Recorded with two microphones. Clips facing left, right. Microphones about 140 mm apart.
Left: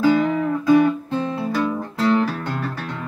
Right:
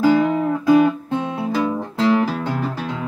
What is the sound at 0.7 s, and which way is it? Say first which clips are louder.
Guitar: right 1 dB; 15° right (ahead or behind).